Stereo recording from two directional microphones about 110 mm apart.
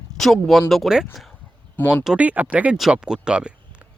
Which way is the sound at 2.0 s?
10° right (ahead or behind).